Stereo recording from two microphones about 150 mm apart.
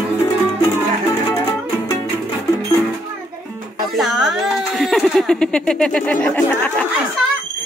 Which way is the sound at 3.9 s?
Centre (ahead or behind).